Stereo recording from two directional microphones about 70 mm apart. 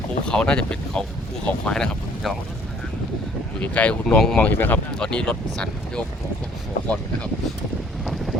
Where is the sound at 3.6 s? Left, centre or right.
Centre.